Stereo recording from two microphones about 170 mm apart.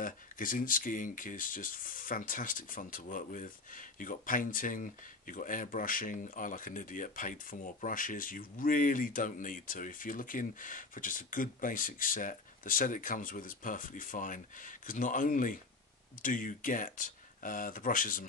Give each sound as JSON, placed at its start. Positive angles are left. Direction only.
{"t": 0.0, "sound": "speech", "side_deg": 55}